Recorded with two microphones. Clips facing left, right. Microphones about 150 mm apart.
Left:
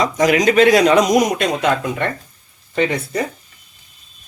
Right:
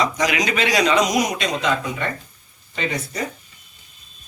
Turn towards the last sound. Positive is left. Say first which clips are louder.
# left 7 dB
turn(degrees=55)  # may be behind; listen again after turning